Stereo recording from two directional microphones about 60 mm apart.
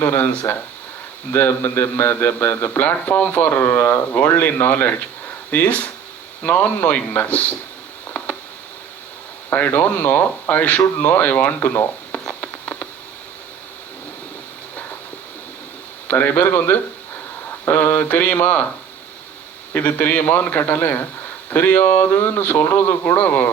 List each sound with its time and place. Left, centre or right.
0.0 s a man's voice: left
8.1 s a sound: left
9.5 s speech: left
12.3 s a sound: left
16.0 s a man's voice: left
19.7 s a man's voice: left